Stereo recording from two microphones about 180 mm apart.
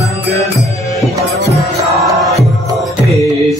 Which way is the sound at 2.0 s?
Centre (ahead or behind).